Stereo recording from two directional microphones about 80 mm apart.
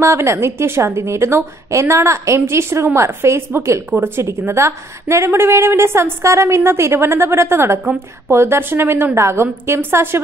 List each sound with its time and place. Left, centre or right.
0.0 s a woman's voice: right